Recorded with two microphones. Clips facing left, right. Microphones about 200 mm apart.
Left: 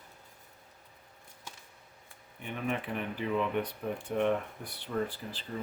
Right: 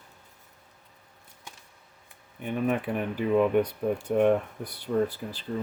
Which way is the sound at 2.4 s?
45° right (ahead or behind).